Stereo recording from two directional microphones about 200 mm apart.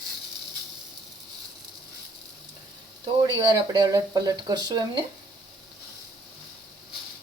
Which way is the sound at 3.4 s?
20° right (ahead or behind).